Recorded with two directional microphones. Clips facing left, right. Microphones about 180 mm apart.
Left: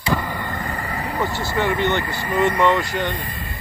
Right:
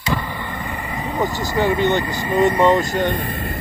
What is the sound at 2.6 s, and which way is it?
Speech, 45° right (ahead or behind).